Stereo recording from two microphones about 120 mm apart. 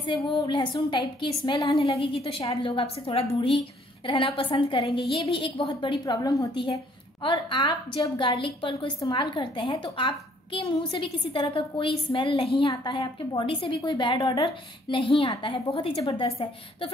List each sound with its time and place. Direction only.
0.0 s a woman's voice: 45° left (ahead or behind)